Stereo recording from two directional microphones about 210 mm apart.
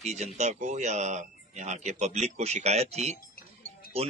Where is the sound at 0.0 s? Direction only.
30° right (ahead or behind).